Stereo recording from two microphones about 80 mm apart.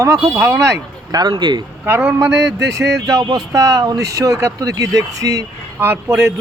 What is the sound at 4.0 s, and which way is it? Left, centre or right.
Speech, right.